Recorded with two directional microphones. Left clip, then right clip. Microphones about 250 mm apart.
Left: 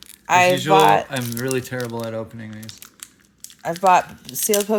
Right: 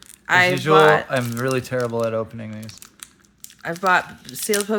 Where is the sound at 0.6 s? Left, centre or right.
Right.